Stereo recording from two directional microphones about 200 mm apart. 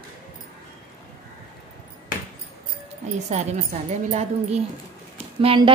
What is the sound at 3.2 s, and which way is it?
A woman's voice, 35° right (ahead or behind).